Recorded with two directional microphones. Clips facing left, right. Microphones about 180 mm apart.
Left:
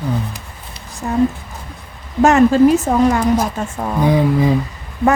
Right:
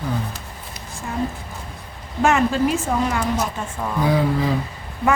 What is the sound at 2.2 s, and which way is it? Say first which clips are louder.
A woman's voice: left 8 dB; 40° left (ahead or behind).